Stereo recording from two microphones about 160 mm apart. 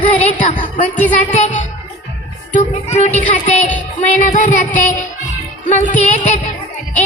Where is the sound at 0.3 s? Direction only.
50° left (ahead or behind).